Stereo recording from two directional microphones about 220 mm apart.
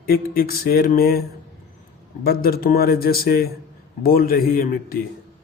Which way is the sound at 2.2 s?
45° left (ahead or behind).